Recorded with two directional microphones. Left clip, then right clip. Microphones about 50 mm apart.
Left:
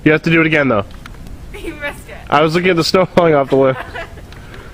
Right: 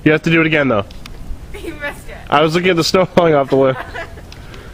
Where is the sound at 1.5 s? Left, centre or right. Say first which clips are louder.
Left 1 dB; centre.